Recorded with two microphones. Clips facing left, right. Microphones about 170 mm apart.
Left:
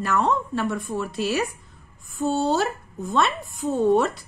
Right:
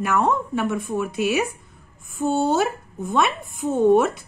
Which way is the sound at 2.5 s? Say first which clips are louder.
Right 2 dB; centre (ahead or behind).